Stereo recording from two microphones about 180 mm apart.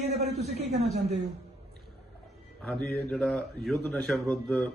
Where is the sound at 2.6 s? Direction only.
Centre (ahead or behind).